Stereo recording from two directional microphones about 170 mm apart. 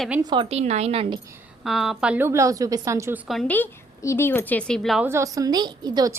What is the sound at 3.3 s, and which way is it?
A woman's voice, 5° left (ahead or behind).